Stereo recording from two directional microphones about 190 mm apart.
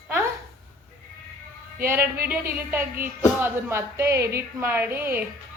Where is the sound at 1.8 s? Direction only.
10° right (ahead or behind).